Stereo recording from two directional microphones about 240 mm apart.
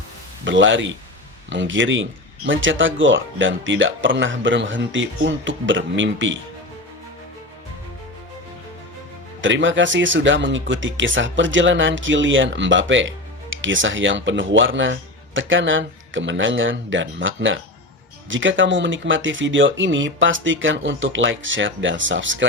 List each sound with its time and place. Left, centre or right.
0.4 s speech: right
9.4 s speech: right